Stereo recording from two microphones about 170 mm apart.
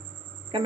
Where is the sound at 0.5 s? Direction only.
30° right (ahead or behind).